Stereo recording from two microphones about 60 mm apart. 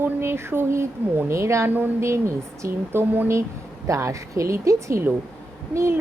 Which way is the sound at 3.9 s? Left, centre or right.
Right.